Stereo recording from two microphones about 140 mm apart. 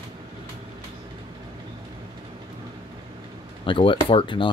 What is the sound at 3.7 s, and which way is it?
Speech, 40° left (ahead or behind).